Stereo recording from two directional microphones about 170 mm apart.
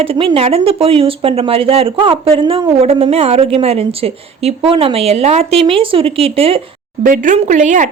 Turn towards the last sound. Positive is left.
turn(degrees=-45)  # may be behind; listen again after turning